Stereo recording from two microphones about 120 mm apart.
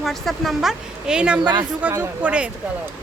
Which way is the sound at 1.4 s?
40° right (ahead or behind).